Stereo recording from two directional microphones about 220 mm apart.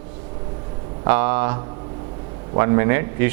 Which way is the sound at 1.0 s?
15° right (ahead or behind).